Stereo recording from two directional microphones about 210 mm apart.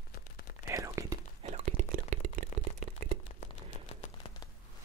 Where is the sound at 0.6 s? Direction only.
15° right (ahead or behind).